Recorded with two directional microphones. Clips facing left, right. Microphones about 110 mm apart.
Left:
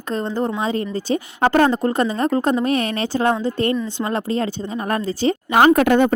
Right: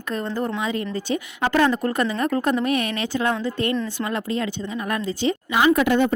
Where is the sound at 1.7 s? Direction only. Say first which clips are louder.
Left 3 dB; 30° left (ahead or behind).